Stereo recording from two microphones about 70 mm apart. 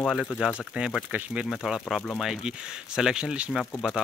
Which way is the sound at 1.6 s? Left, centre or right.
Centre.